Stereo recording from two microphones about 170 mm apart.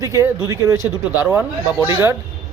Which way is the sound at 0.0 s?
20° right (ahead or behind).